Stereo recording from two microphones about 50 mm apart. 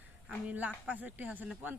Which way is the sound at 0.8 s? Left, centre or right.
Right.